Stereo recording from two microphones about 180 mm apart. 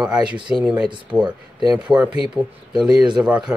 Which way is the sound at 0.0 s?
5° right (ahead or behind).